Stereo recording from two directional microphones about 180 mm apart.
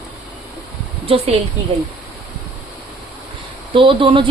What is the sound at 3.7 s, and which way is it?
Speech, 30° right (ahead or behind).